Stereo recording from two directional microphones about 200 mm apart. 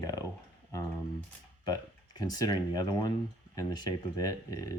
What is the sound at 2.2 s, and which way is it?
Speech, 20° left (ahead or behind).